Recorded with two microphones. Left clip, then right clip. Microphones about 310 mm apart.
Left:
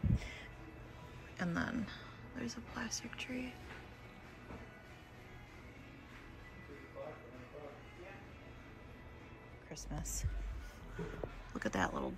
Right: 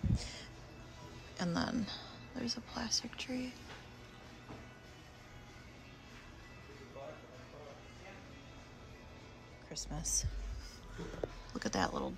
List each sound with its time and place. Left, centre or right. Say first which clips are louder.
0.1 s music: right 1 dB; centre
1.3 s speech: right 2 dB; centre
9.7 s speech: right 7 dB; centre
11.5 s speech: right 1 dB; centre